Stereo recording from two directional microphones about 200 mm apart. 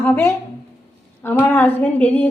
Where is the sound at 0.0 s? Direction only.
10° left (ahead or behind).